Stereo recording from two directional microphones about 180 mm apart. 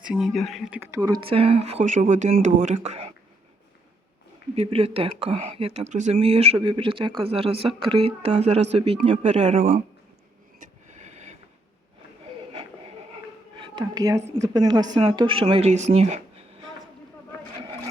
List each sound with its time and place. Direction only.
0.0 s speech: 5° right (ahead or behind)
0.9 s speech: 20° right (ahead or behind); by 3.1 s 35° right (ahead or behind)
4.5 s speech: 35° right (ahead or behind)
10.6 s vehicle: 40° right (ahead or behind)
12.5 s a sound: 30° right (ahead or behind)
13.6 s a woman's voice: 25° right (ahead or behind)